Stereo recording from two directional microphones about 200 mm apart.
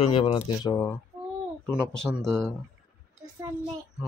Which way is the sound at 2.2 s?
5° left (ahead or behind).